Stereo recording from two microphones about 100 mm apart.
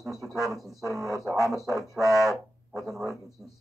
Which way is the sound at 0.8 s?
35° right (ahead or behind).